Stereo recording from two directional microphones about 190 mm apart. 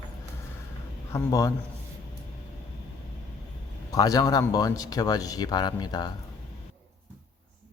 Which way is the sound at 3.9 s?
20° left (ahead or behind).